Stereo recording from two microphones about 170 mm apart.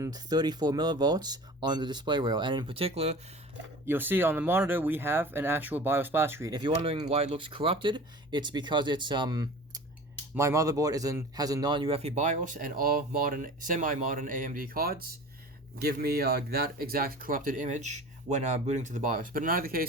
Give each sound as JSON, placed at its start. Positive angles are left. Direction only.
{"t": 0.0, "sound": "speech", "side_deg": -20}
{"t": 3.8, "sound": "speech", "side_deg": -10}